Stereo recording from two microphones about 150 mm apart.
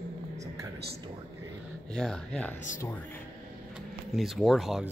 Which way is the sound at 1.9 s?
5° left (ahead or behind).